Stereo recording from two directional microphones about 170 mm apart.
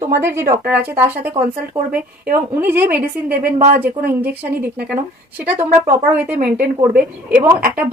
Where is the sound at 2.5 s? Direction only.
10° right (ahead or behind).